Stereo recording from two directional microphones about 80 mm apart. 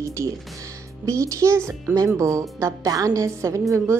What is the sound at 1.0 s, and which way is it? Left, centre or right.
Speech, right.